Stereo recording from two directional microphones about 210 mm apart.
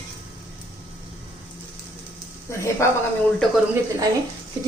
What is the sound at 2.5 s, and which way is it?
Speech, 15° left (ahead or behind).